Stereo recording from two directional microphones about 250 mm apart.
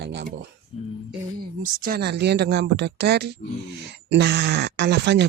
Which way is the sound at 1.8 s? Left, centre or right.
Right.